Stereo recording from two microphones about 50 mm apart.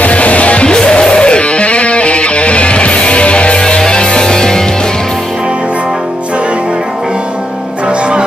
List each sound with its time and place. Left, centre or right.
0.0 s music: left; by 4.6 s centre